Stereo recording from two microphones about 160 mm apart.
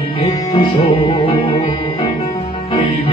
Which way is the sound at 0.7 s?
35° left (ahead or behind).